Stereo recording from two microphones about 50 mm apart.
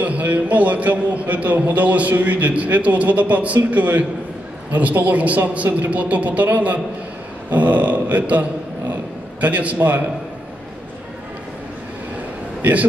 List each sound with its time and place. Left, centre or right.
0.0 s a man's voice: right